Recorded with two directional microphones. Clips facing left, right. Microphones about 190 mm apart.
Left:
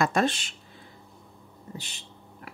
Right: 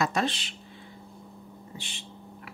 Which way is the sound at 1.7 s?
40° left (ahead or behind).